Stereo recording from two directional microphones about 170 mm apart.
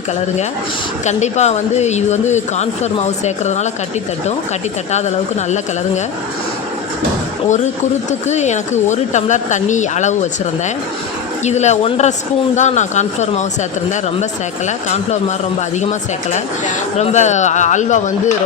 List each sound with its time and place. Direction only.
1.0 s speech: 40° left (ahead or behind)
4.9 s speech: 40° left (ahead or behind)
8.3 s speech: 45° left (ahead or behind)
11.4 s speech: 40° left (ahead or behind)